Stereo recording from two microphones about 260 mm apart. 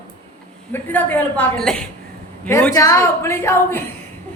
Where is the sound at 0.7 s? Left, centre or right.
Centre.